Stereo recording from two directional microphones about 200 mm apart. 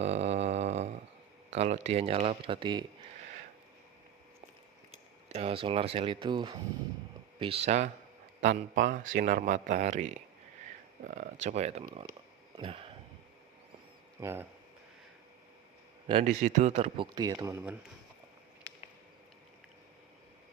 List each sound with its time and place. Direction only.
0.0 s a sound: 30° right (ahead or behind)
1.5 s speech: 35° right (ahead or behind)
5.3 s speech: 30° right (ahead or behind)
12.5 s a sound: 25° right (ahead or behind)
14.2 s speech: 10° right (ahead or behind)
16.2 s speech: 35° right (ahead or behind); by 17.7 s 10° right (ahead or behind)